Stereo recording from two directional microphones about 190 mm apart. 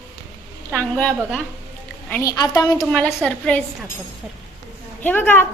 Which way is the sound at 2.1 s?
15° left (ahead or behind).